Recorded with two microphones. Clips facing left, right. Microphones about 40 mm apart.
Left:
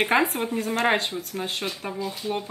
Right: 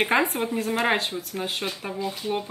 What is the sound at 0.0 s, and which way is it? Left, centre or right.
Speech, centre.